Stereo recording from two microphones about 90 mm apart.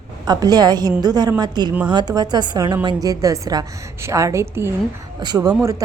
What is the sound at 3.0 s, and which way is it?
Speech, 40° right (ahead or behind).